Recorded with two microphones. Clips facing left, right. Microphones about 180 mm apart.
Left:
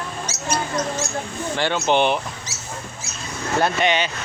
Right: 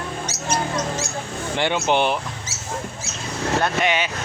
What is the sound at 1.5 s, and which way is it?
Speech, 15° right (ahead or behind).